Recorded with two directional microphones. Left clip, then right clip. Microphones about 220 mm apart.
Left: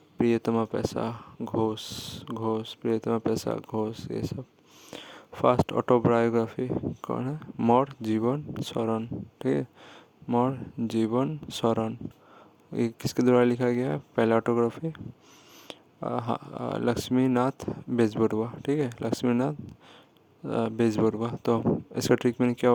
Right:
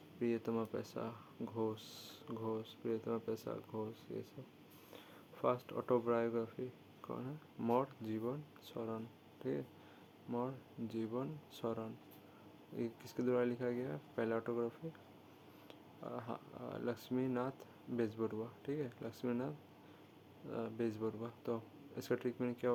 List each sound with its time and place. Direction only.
0.2 s speech: 45° left (ahead or behind)